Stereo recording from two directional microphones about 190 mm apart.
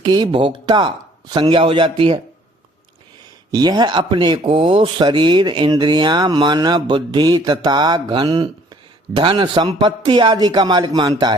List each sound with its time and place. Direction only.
0.0 s speech: 25° right (ahead or behind)
3.5 s speech: 20° right (ahead or behind)